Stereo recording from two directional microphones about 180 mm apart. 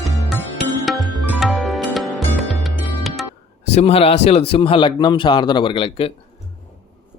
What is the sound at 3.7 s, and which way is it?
A man's voice, 30° left (ahead or behind).